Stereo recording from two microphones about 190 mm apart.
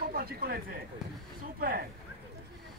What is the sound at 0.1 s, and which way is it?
Speech, 55° right (ahead or behind).